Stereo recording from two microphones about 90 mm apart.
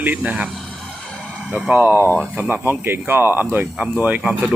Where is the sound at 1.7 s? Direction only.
20° right (ahead or behind).